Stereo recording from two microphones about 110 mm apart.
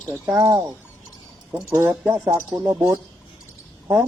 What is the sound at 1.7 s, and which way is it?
Speech, 25° right (ahead or behind).